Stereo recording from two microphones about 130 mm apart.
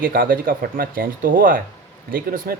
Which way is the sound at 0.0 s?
90° right.